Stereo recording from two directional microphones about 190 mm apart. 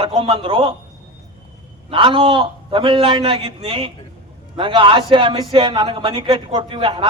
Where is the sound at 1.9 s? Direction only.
25° right (ahead or behind).